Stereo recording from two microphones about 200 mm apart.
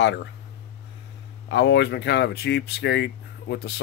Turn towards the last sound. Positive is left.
turn(degrees=55)  # may be behind; listen again after turning